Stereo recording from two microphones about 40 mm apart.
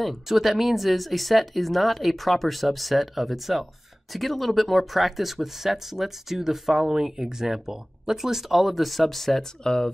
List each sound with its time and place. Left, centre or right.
0.0 s speech: centre
9.6 s speech: centre